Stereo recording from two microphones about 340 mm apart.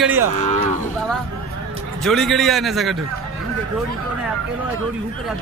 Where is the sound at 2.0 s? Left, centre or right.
Centre.